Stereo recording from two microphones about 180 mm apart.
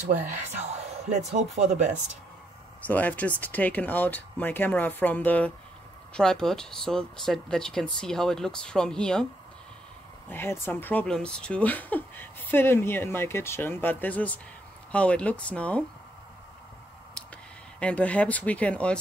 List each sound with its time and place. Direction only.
0.6 s speech: 40° right (ahead or behind)
2.9 s speech: 10° left (ahead or behind)
10.3 s speech: 15° left (ahead or behind)
17.7 s speech: 5° left (ahead or behind)